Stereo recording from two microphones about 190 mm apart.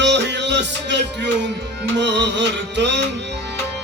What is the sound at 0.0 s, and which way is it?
Music, 65° right (ahead or behind).